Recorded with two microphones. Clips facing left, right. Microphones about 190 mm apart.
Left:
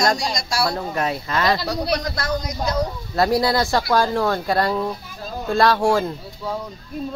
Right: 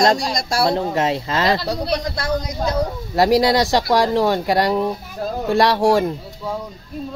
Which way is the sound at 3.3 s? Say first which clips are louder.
Right 5 dB; 90° right.